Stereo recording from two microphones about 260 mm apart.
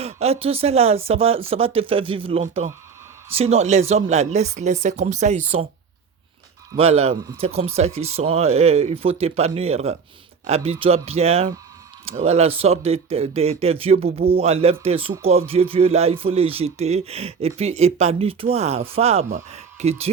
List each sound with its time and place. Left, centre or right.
0.0 s speech: right
6.7 s speech: right